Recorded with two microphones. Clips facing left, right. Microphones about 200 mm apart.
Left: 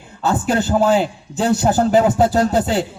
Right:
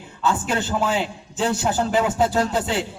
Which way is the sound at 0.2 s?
40° left (ahead or behind).